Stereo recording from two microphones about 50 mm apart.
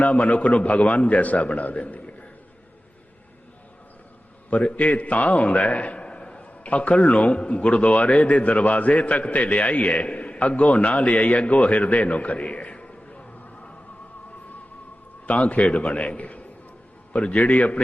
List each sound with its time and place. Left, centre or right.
0.0 s a man's voice: left
4.4 s a man's voice: left
15.3 s a man's voice: left